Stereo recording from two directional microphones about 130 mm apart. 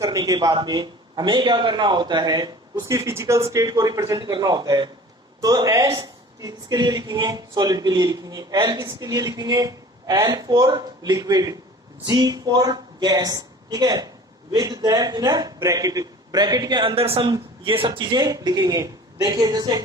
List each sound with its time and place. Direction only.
0.0 s a woman's voice: 25° right (ahead or behind)